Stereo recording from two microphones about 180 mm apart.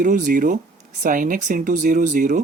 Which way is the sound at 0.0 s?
45° right (ahead or behind).